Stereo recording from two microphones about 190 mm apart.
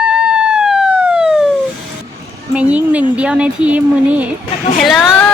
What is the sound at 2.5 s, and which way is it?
Speech, 5° right (ahead or behind).